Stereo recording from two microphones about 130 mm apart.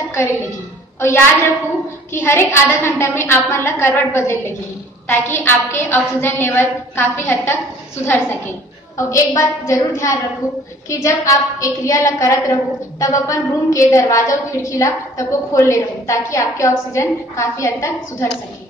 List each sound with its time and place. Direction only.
0.9 s a woman's voice: 20° left (ahead or behind)
8.9 s a woman's voice: 25° left (ahead or behind)